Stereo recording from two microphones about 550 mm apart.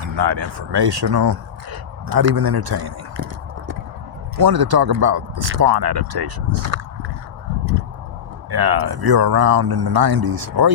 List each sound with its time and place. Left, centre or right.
0.2 s speech: right
4.4 s speech: right
6.7 s a sound: right
8.4 s speech: right